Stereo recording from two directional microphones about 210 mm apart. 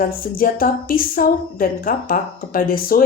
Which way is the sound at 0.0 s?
40° left (ahead or behind).